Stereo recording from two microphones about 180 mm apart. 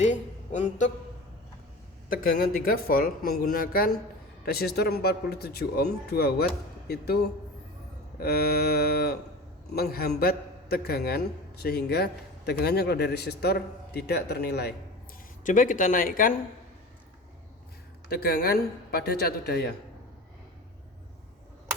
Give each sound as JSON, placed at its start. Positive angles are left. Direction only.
{"t": 0.0, "sound": "a man's voice", "side_deg": 40}
{"t": 2.0, "sound": "a man's voice", "side_deg": 55}
{"t": 8.2, "sound": "a man's voice", "side_deg": 55}
{"t": 15.4, "sound": "speech", "side_deg": 45}
{"t": 18.1, "sound": "a man's voice", "side_deg": 60}